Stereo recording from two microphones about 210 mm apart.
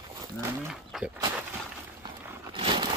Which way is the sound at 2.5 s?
25° right (ahead or behind).